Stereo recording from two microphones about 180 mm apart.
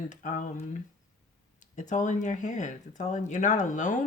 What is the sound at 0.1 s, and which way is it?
Speech, 45° left (ahead or behind).